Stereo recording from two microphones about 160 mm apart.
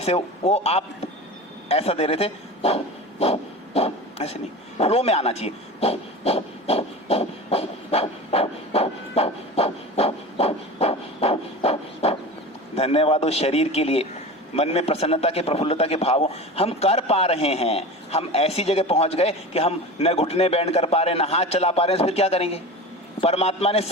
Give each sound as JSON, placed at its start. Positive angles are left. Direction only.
{"t": 0.0, "sound": "a man's voice", "side_deg": 40}
{"t": 3.8, "sound": "a sound", "side_deg": 40}
{"t": 12.7, "sound": "a man's voice", "side_deg": 40}